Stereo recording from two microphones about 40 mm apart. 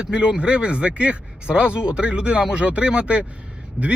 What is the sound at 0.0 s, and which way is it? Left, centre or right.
Speech, right.